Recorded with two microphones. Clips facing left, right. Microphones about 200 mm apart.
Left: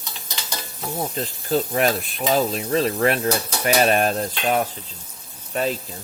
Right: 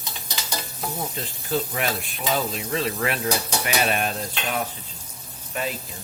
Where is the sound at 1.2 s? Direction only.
40° left (ahead or behind).